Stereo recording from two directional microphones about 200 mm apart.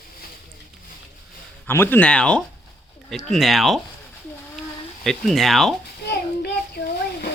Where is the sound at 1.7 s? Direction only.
10° left (ahead or behind).